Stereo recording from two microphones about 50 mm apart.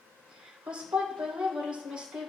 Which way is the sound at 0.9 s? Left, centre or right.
Centre.